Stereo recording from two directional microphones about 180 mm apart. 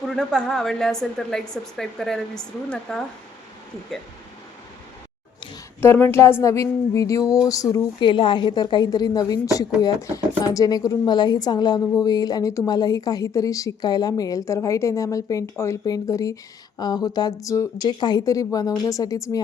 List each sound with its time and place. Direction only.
0.0 s speech: centre (ahead or behind)
5.8 s a sound: 10° left (ahead or behind)
7.4 s a woman's voice: 20° left (ahead or behind)